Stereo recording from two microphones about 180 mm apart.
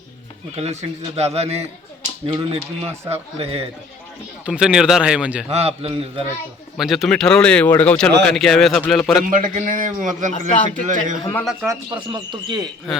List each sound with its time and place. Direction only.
0.5 s a man's voice: 40° right (ahead or behind)
4.4 s speech: 5° right (ahead or behind)
5.5 s a man's voice: 35° right (ahead or behind)
6.7 s speech: centre (ahead or behind)
9.2 s a man's voice: 50° right (ahead or behind)
11.6 s speech: 20° right (ahead or behind)